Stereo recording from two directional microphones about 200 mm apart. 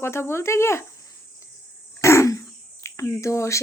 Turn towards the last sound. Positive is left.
turn(degrees=15)  # may be behind; listen again after turning